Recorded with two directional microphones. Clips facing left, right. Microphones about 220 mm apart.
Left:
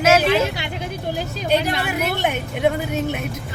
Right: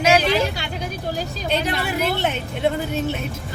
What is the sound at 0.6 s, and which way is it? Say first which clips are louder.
A woman's voice: left 1 dB; 20° left (ahead or behind).